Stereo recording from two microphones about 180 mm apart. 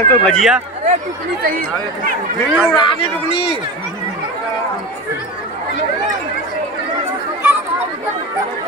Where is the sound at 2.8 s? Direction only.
30° left (ahead or behind).